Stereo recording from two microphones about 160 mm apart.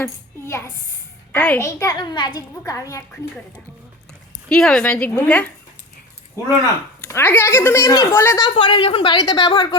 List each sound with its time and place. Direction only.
0.0 s a woman's voice: 15° left (ahead or behind)
4.4 s speech: 5° left (ahead or behind)
7.0 s speech: 15° left (ahead or behind)
8.4 s a woman's voice: 30° left (ahead or behind)